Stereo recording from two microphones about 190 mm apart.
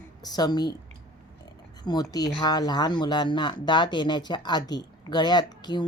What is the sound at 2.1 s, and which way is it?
Speech, 20° left (ahead or behind).